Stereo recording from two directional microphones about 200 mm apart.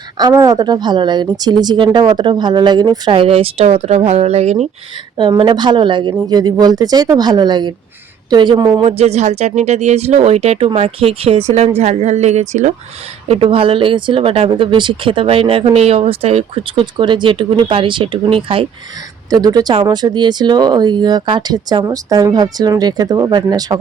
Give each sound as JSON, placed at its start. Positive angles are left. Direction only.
{"t": 0.2, "sound": "speech", "side_deg": -20}